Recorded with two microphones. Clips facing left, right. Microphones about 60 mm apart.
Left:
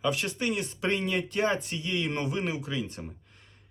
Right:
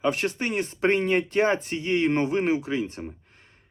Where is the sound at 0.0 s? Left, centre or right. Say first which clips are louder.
Right 4 dB; right.